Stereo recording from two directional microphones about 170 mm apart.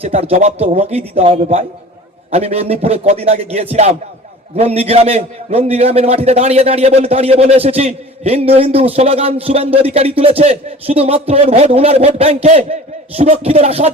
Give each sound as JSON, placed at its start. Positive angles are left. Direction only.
{"t": 0.0, "sound": "a man's voice", "side_deg": -35}